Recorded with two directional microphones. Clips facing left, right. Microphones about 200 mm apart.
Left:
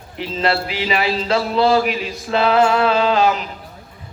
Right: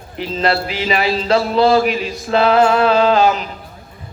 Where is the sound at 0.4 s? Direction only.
45° right (ahead or behind).